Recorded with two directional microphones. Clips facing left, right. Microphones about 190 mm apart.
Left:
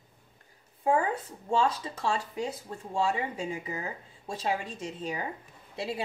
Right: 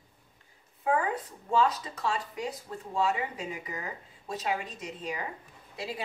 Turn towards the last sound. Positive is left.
turn(degrees=25)  # may be behind; listen again after turning